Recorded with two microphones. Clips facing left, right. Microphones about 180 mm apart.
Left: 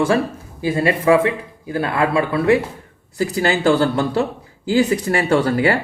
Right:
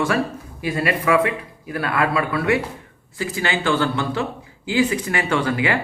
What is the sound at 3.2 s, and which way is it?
Speech, 40° left (ahead or behind).